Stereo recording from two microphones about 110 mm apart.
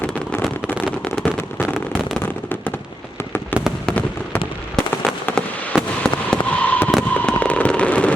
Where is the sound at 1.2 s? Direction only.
Centre (ahead or behind).